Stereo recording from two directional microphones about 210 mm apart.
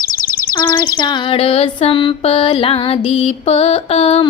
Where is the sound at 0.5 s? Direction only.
20° left (ahead or behind).